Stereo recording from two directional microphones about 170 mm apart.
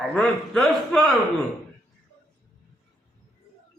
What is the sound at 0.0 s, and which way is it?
A man's voice, centre (ahead or behind).